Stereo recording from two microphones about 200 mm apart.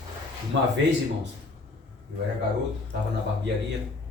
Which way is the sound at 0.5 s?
65° right (ahead or behind).